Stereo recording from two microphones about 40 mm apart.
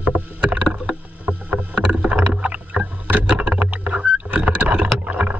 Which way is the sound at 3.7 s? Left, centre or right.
Right.